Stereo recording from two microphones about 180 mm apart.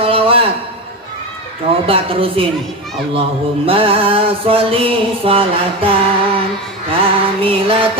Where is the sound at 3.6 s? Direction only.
30° right (ahead or behind).